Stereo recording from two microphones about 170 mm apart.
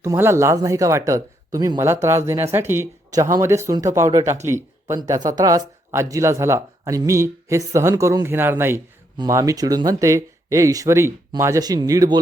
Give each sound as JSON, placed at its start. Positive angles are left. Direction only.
{"t": 0.0, "sound": "speech", "side_deg": -15}